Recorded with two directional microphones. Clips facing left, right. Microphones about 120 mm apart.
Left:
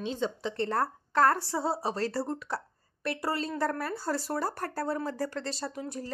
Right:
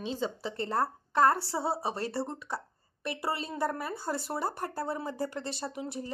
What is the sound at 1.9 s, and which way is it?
Speech, 20° right (ahead or behind).